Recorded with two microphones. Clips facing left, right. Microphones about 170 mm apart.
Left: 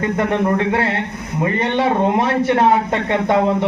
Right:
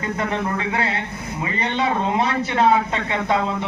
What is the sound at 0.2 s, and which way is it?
Speech, 55° left (ahead or behind).